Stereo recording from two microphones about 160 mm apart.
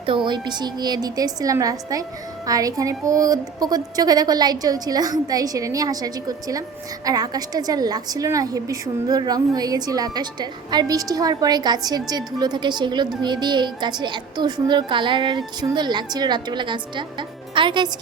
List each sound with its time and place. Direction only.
0.3 s a woman's voice: 25° right (ahead or behind)